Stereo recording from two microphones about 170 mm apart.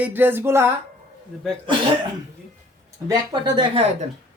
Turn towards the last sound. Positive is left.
turn(degrees=-25)  # may be behind; listen again after turning